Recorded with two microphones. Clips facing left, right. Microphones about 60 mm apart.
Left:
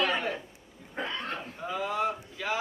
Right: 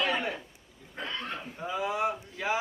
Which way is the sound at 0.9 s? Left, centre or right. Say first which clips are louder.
Left 2 dB; centre.